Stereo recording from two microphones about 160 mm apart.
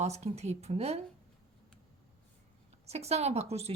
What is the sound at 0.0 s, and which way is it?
A woman's voice, 45° right (ahead or behind).